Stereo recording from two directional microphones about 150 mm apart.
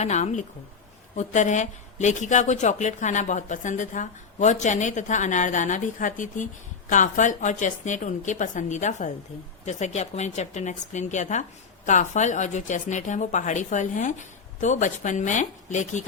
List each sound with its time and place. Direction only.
0.0 s speech: 50° left (ahead or behind)